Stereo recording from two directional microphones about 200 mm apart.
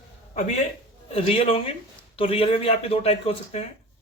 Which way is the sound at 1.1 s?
30° left (ahead or behind).